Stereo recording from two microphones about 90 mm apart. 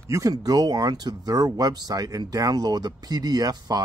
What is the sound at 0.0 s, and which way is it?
Speech, 40° right (ahead or behind).